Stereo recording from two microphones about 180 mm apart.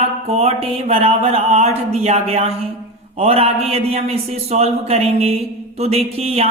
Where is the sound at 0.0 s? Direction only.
35° right (ahead or behind).